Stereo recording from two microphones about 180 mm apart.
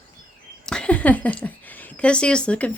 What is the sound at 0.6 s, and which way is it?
Speech, 5° left (ahead or behind).